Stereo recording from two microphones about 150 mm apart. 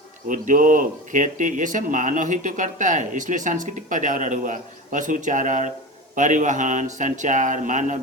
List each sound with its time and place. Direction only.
0.3 s speech: 60° right (ahead or behind)